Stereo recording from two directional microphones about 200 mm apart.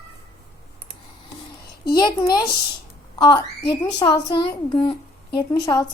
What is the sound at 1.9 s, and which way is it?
Speech, 20° left (ahead or behind).